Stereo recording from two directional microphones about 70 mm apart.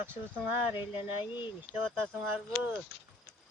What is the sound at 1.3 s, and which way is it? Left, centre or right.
Speech, right.